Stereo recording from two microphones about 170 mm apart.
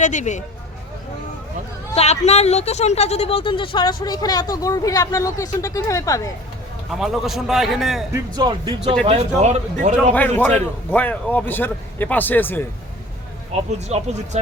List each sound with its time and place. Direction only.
0.0 s speech: 45° left (ahead or behind)
2.0 s speech: 40° left (ahead or behind); by 6.2 s 20° left (ahead or behind)
6.9 s a man's voice: centre (ahead or behind)
8.1 s speech: 25° right (ahead or behind)
9.0 s speech: 40° right (ahead or behind)
10.2 s speech: 10° left (ahead or behind)
13.7 s speech: 40° right (ahead or behind)